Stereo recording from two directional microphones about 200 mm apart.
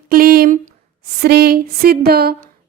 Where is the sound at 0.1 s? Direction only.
50° right (ahead or behind).